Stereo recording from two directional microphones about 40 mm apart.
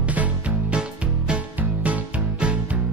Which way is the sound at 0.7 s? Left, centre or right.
Right.